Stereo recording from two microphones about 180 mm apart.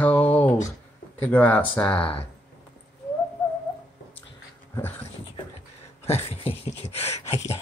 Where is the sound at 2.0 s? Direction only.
30° left (ahead or behind).